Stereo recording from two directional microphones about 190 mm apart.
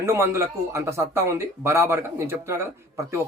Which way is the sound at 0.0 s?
15° right (ahead or behind).